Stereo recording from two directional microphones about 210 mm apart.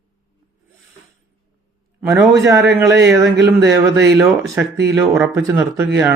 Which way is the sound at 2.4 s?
15° right (ahead or behind).